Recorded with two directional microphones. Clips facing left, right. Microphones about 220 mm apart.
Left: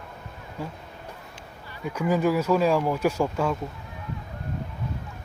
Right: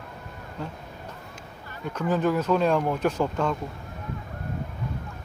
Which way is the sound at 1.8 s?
10° left (ahead or behind).